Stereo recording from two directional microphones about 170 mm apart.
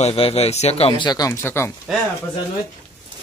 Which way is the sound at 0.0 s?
35° left (ahead or behind).